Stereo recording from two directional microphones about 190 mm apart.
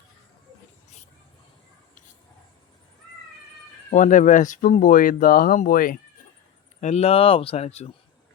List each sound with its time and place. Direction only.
3.9 s speech: 40° left (ahead or behind)
6.8 s speech: 35° left (ahead or behind)